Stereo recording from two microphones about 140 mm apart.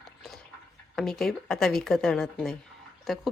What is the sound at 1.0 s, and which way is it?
A woman's voice, 5° left (ahead or behind).